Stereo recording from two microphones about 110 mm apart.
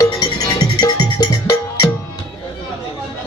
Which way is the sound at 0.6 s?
40° left (ahead or behind).